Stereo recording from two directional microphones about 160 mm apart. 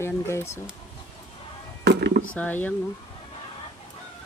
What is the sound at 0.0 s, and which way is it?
Speech, 15° left (ahead or behind).